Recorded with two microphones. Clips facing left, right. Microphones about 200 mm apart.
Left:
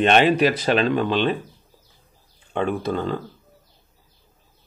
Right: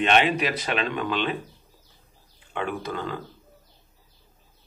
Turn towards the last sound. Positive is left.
turn(degrees=30)  # may be behind; listen again after turning